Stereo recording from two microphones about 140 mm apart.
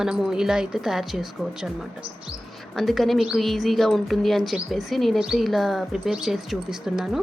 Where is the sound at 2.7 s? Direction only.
Centre (ahead or behind).